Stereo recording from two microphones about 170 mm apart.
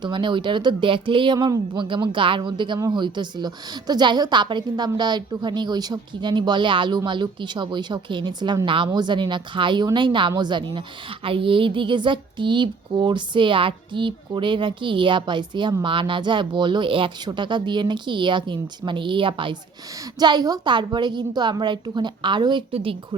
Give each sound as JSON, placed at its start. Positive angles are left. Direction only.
{"t": 0.0, "sound": "speech", "side_deg": -30}